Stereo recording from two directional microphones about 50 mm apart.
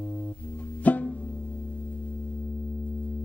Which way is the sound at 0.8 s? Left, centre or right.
Left.